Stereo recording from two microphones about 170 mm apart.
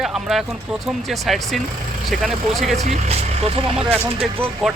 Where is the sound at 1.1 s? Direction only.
Centre (ahead or behind).